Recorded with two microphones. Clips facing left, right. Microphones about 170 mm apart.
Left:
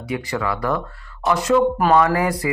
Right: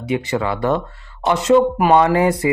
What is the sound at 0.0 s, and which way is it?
Speech, 25° right (ahead or behind).